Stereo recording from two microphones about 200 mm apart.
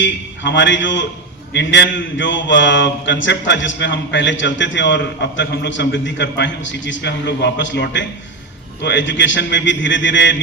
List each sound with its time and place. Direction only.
0.0 s a man's voice: 65° left (ahead or behind)